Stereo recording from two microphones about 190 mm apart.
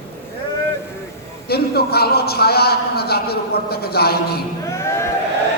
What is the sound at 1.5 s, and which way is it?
A man's voice, 55° left (ahead or behind).